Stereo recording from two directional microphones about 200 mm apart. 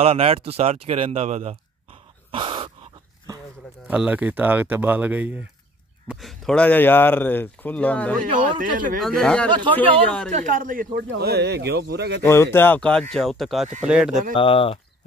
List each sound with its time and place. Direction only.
0.0 s a sound: 30° right (ahead or behind)
3.8 s speech: 5° right (ahead or behind)
8.7 s speech: 40° right (ahead or behind)
9.0 s speech: 5° left (ahead or behind)
9.5 s speech: 25° right (ahead or behind)
10.0 s speech: 5° left (ahead or behind)
10.3 s a man's voice: 40° right (ahead or behind); by 12.2 s 55° right (ahead or behind)
12.2 s speech: 10° left (ahead or behind); by 14.2 s 5° right (ahead or behind)
14.3 s speech: 25° left (ahead or behind)